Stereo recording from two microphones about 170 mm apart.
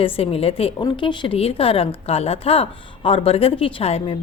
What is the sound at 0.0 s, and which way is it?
A woman's voice, 35° left (ahead or behind).